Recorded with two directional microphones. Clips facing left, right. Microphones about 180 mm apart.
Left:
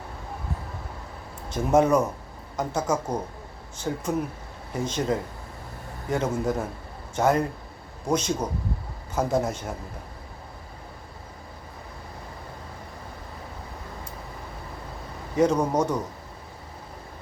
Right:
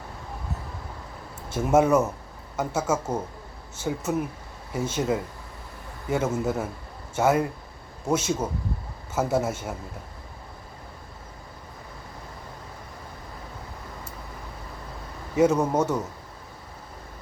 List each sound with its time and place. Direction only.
1.5 s speech: 10° right (ahead or behind)
15.4 s speech: 5° right (ahead or behind)